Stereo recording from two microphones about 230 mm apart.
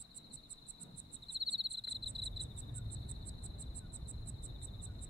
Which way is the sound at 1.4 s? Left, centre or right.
Right.